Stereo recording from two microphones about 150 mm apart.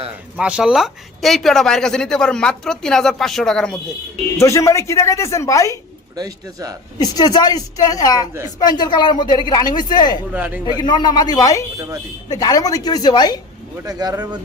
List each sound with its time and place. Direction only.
0.3 s speech: 5° right (ahead or behind)
4.4 s speech: 20° left (ahead or behind)
6.1 s a man's voice: 25° right (ahead or behind)
7.0 s speech: 25° left (ahead or behind)
8.3 s a man's voice: 15° right (ahead or behind)
8.5 s speech: 25° left (ahead or behind)
10.3 s a man's voice: 10° right (ahead or behind)
10.8 s speech: 30° left (ahead or behind)
13.8 s a man's voice: 25° right (ahead or behind)